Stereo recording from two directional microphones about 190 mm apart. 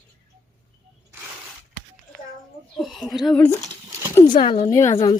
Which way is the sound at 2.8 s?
Centre (ahead or behind).